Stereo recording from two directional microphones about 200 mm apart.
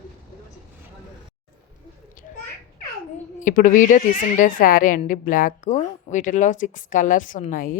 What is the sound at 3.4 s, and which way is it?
A woman's voice, 40° left (ahead or behind).